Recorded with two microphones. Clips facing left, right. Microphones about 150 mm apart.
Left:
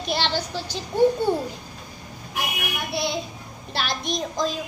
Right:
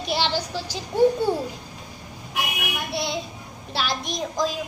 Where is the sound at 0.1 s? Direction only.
10° right (ahead or behind).